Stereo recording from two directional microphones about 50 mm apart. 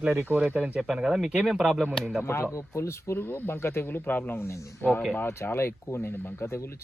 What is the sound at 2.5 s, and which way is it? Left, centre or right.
Speech, left.